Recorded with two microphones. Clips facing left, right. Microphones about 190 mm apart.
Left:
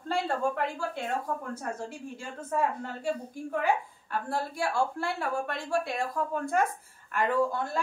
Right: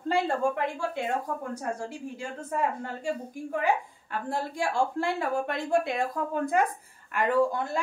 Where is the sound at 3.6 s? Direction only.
15° right (ahead or behind).